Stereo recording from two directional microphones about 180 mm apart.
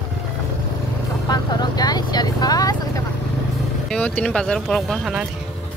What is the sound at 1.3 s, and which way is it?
Vehicle, 20° left (ahead or behind).